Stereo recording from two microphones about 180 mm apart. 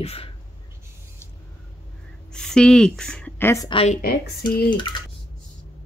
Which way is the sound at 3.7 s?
30° left (ahead or behind).